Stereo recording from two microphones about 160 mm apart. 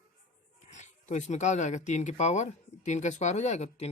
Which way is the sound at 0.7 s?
45° left (ahead or behind).